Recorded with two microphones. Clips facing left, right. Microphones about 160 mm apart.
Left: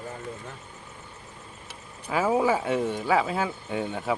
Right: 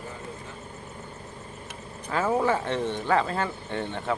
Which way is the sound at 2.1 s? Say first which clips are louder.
Left 1 dB; 10° left (ahead or behind).